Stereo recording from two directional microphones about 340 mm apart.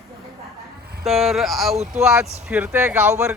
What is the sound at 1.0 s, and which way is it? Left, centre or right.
Speech, centre.